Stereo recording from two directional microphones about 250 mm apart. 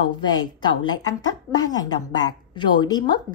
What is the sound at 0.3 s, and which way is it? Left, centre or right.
A woman's voice, centre.